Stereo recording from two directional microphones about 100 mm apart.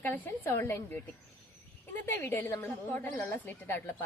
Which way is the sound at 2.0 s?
25° left (ahead or behind).